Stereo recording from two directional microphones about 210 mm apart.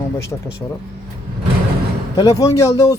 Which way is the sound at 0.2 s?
15° left (ahead or behind).